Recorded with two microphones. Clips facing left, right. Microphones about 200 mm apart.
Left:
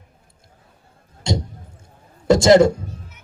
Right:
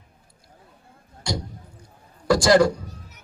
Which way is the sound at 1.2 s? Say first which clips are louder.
Left 5 dB; 25° left (ahead or behind).